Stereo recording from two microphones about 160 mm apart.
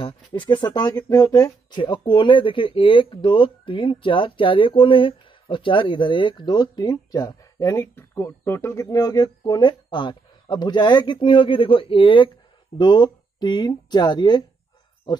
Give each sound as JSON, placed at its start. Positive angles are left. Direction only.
{"t": 0.0, "sound": "speech", "side_deg": 30}